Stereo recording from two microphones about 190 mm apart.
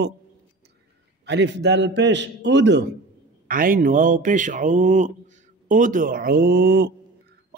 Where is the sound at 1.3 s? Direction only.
65° right (ahead or behind).